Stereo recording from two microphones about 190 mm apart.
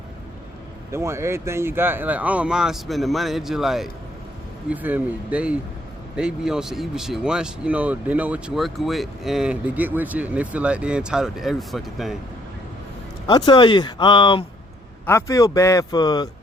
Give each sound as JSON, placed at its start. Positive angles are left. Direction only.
{"t": 0.9, "sound": "speech", "side_deg": -15}
{"t": 13.2, "sound": "speech", "side_deg": 25}